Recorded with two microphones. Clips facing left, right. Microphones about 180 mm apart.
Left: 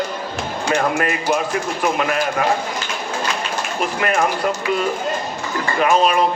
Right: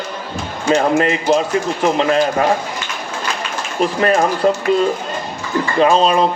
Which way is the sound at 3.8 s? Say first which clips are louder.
Right 5 dB; 30° right (ahead or behind).